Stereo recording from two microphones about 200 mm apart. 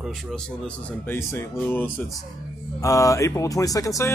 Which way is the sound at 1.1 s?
15° left (ahead or behind).